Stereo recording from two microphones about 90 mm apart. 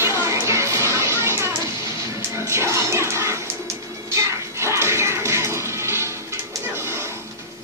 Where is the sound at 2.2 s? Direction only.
30° right (ahead or behind).